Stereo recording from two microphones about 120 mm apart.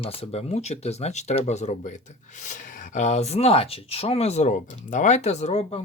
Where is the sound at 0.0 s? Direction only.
55° left (ahead or behind); by 2.0 s 80° left.